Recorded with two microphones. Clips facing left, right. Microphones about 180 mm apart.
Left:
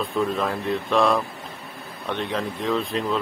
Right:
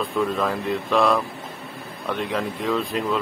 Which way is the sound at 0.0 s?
Centre (ahead or behind).